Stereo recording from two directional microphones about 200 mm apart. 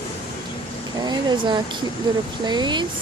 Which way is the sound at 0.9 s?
20° right (ahead or behind).